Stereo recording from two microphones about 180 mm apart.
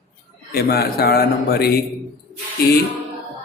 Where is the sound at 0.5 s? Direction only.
60° left (ahead or behind).